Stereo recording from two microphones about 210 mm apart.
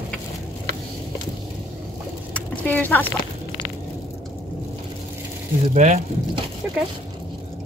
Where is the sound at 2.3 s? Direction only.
10° left (ahead or behind).